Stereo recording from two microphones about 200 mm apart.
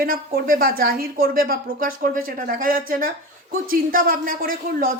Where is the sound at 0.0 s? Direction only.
45° right (ahead or behind).